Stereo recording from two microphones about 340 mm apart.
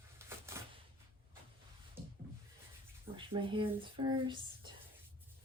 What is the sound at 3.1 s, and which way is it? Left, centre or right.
Speech, centre.